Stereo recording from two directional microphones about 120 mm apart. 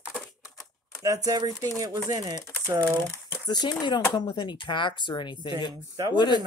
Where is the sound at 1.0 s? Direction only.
30° right (ahead or behind).